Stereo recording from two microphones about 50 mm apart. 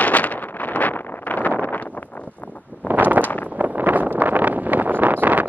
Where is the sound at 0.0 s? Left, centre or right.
Left.